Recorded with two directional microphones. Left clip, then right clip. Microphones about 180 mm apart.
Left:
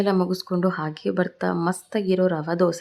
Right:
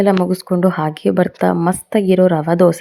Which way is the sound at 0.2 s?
15° right (ahead or behind).